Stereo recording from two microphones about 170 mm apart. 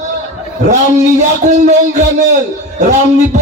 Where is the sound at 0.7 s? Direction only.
45° right (ahead or behind).